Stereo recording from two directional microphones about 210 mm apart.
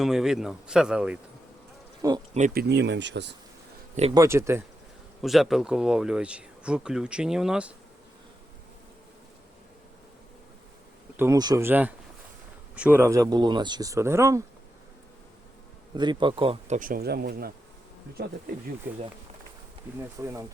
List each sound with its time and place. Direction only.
0.0 s speech: centre (ahead or behind)
2.0 s speech: 20° right (ahead or behind)
2.5 s speech: 50° right (ahead or behind)
4.1 s speech: 15° right (ahead or behind)
5.2 s speech: centre (ahead or behind)
11.2 s speech: 15° right (ahead or behind)
16.0 s speech: 20° right (ahead or behind); by 18.3 s 50° right (ahead or behind)
20.2 s speech: 10° right (ahead or behind)